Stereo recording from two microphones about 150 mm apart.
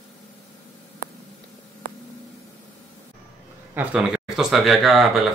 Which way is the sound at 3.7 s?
5° right (ahead or behind).